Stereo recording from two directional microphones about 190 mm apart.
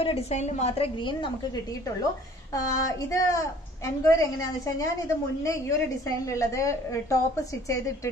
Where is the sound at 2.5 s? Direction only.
20° left (ahead or behind).